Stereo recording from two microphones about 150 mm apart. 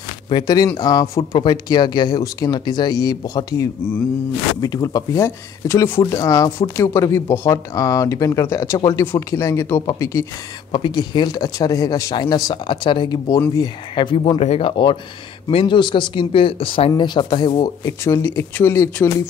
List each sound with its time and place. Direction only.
0.3 s speech: 25° left (ahead or behind)